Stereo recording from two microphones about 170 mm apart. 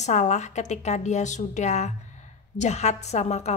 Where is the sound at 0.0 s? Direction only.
45° left (ahead or behind).